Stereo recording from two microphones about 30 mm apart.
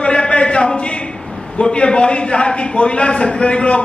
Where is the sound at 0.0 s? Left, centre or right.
Left.